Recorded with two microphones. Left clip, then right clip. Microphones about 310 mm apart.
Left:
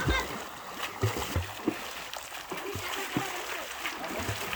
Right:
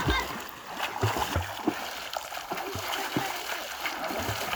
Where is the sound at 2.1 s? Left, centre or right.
Centre.